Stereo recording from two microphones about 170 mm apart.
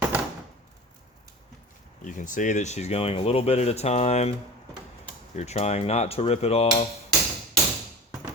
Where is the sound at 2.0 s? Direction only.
50° left (ahead or behind).